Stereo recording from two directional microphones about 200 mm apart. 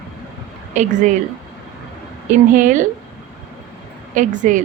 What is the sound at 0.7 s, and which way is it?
Speech, 35° right (ahead or behind).